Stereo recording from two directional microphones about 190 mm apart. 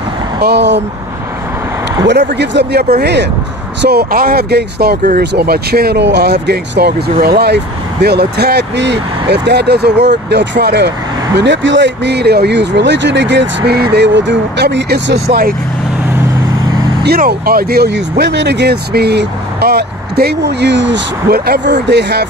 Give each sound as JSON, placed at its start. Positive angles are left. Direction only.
{"t": 0.4, "sound": "speech", "side_deg": -60}
{"t": 2.0, "sound": "speech", "side_deg": -65}
{"t": 17.0, "sound": "speech", "side_deg": -55}